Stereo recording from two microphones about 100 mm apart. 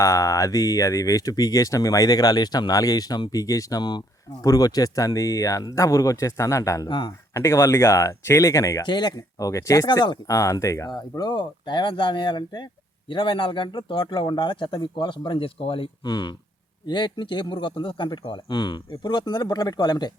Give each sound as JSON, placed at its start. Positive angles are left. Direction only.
{"t": 0.0, "sound": "speech", "side_deg": 35}
{"t": 6.8, "sound": "speech", "side_deg": 55}
{"t": 7.3, "sound": "speech", "side_deg": 30}
{"t": 8.8, "sound": "speech", "side_deg": 50}
{"t": 10.3, "sound": "speech", "side_deg": 30}
{"t": 11.2, "sound": "a man's voice", "side_deg": 45}
{"t": 16.0, "sound": "speech", "side_deg": 45}